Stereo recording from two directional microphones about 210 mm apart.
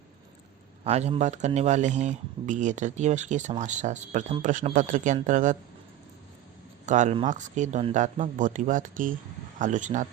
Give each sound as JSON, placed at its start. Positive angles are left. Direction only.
{"t": 0.9, "sound": "speech", "side_deg": -30}
{"t": 6.8, "sound": "speech", "side_deg": -35}